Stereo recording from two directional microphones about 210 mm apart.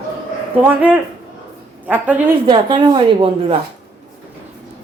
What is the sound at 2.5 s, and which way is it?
Speech, 20° right (ahead or behind).